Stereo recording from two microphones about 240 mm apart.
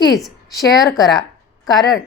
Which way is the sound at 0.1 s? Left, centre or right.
Centre.